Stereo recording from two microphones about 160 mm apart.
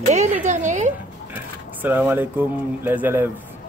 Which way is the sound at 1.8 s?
10° right (ahead or behind).